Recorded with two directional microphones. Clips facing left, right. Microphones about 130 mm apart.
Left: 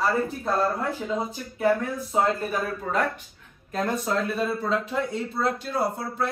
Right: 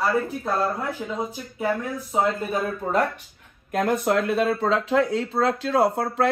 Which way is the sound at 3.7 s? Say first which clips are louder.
Right 5 dB; 50° right (ahead or behind).